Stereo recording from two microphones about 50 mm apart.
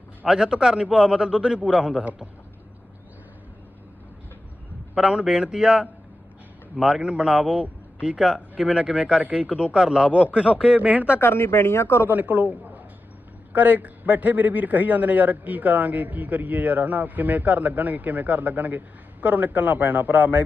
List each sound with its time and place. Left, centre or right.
0.3 s a man's voice: centre
5.0 s speech: centre
6.8 s a man's voice: centre
10.8 s a man's voice: right
11.1 s speech: left
12.0 s a man's voice: right